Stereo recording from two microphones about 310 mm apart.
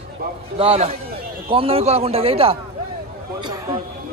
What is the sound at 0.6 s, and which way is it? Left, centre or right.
A man's voice, centre.